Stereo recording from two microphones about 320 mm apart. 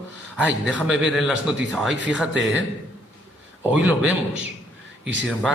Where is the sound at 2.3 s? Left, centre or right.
Right.